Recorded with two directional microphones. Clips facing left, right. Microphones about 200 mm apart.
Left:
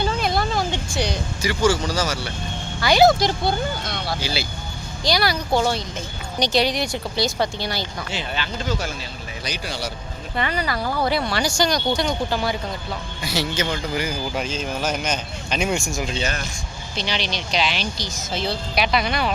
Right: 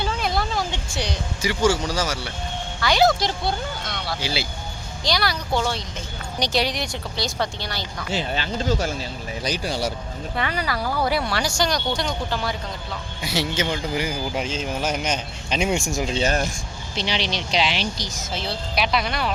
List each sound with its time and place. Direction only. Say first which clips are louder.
0.0 s a sound: left 3 dB; centre (ahead or behind)
1.9 s speech: left 1 dB; 15° right (ahead or behind)
2.8 s speech: left 4 dB; 5° left (ahead or behind)
4.2 s a man's voice: even; 25° right (ahead or behind)
5.0 s speech: left 3 dB; 5° left (ahead or behind)
8.1 s a man's voice: right 5 dB; 40° right (ahead or behind)
10.3 s speech: left 2 dB; 5° right (ahead or behind)
13.2 s a man's voice: even; 20° right (ahead or behind); by 16.5 s 45° right (ahead or behind)
17.1 s a man's voice: right 1 dB; 25° right (ahead or behind)
18.3 s speech: left 4 dB; 5° right (ahead or behind)